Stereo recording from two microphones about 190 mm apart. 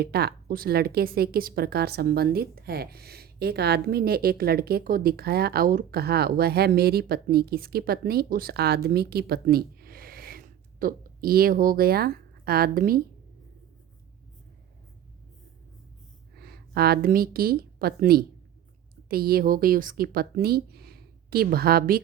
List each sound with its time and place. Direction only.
0.0 s a woman's voice: 55° right (ahead or behind)
16.3 s a woman's voice: 55° right (ahead or behind)